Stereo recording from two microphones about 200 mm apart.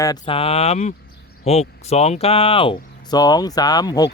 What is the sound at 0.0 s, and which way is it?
Speech, 25° left (ahead or behind).